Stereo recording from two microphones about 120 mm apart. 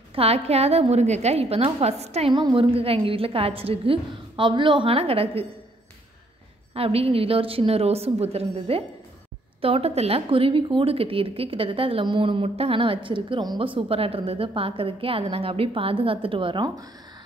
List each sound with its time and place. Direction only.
0.1 s a woman's voice: 55° right (ahead or behind)
2.3 s a woman's voice: 45° right (ahead or behind)
6.7 s a woman's voice: 55° right (ahead or behind)